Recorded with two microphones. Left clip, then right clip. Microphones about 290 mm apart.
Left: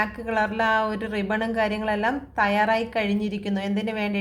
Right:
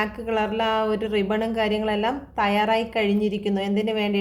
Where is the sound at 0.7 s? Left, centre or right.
Left.